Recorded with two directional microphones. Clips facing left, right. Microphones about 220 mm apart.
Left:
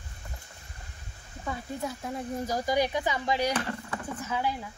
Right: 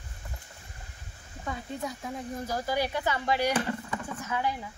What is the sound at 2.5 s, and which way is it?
Speech, 15° left (ahead or behind).